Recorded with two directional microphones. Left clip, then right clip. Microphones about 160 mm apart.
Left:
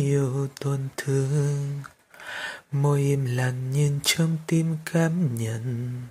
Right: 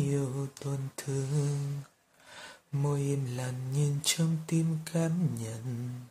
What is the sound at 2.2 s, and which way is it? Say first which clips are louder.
Speech: left 15 dB; 35° left (ahead or behind).